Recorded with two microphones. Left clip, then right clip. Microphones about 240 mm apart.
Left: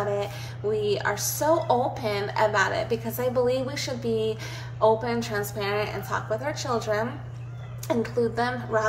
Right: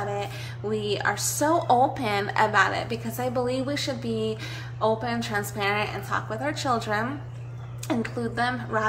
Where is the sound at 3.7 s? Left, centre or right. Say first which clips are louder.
Left 1 dB; centre.